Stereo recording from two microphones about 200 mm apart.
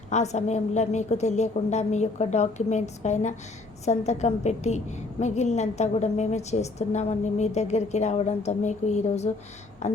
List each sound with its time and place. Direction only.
0.1 s a woman's voice: 35° left (ahead or behind)